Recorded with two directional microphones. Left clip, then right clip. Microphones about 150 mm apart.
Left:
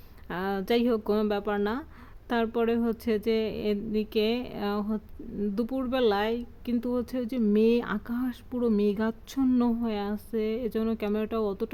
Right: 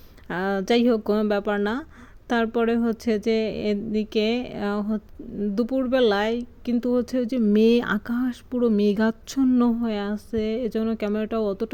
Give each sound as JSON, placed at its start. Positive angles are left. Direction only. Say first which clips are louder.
{"t": 0.3, "sound": "speech", "louder": "right 5 dB", "side_deg": -30}